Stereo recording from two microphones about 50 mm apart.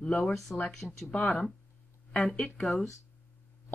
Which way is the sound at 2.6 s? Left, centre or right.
Centre.